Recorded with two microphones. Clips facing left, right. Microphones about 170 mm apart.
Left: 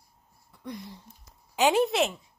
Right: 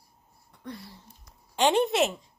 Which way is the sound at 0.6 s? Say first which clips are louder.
Left 2 dB; 15° left (ahead or behind).